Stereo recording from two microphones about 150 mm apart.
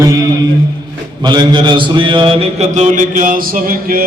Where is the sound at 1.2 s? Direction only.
30° right (ahead or behind).